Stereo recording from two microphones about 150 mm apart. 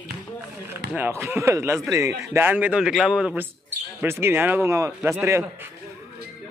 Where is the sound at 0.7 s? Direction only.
15° right (ahead or behind).